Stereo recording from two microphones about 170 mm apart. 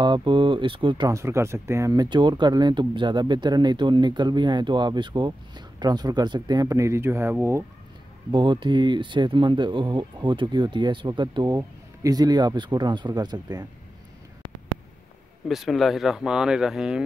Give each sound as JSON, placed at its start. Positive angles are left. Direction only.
{"t": 0.0, "sound": "speech", "side_deg": -30}
{"t": 8.3, "sound": "speech", "side_deg": -30}
{"t": 15.4, "sound": "speech", "side_deg": 0}